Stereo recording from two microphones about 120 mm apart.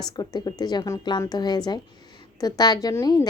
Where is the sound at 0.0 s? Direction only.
35° left (ahead or behind).